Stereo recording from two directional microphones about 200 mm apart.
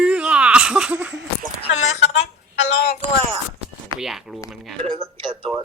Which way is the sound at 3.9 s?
Centre (ahead or behind).